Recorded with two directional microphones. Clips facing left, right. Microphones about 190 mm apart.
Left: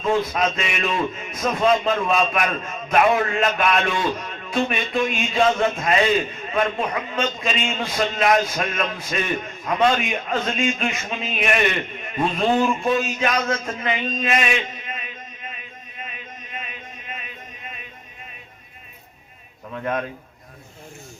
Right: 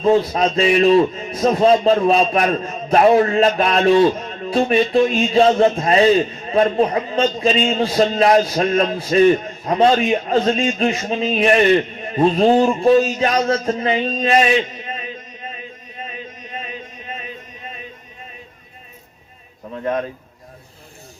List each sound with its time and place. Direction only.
0.0 s a man's voice: 35° right (ahead or behind)
19.7 s a man's voice: 35° right (ahead or behind)